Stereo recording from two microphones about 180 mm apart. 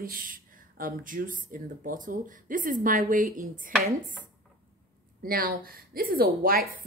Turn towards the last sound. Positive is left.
turn(degrees=-55)  # may be behind; listen again after turning